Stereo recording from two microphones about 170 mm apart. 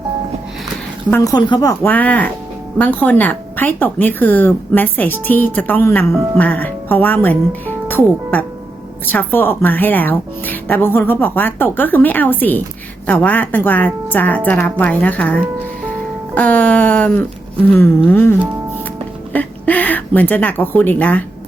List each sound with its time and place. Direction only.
1.1 s a woman's voice: 20° left (ahead or behind)
1.8 s speech: 10° left (ahead or behind)